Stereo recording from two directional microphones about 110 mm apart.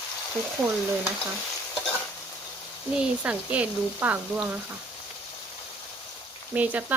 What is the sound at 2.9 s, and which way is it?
Speech, 10° right (ahead or behind).